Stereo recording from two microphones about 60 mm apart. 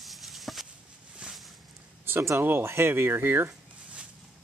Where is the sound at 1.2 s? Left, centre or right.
Centre.